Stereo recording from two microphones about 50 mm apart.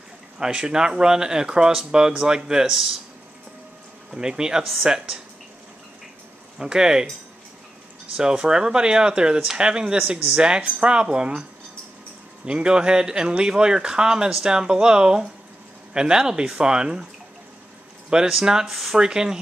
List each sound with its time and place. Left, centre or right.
0.4 s speech: centre
4.1 s speech: centre
6.6 s speech: centre
8.2 s speech: centre
12.4 s speech: centre
18.3 s speech: centre
18.7 s speech: centre
18.9 s speech: centre